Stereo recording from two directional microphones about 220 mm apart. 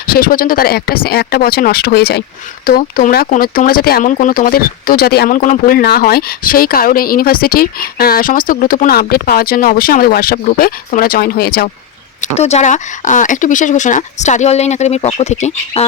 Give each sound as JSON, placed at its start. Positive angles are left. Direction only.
{"t": 0.1, "sound": "speech", "side_deg": 40}
{"t": 12.2, "sound": "speech", "side_deg": 30}